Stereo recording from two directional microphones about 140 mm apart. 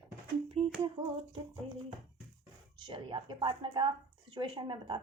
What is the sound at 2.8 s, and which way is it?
A woman's voice, 35° right (ahead or behind).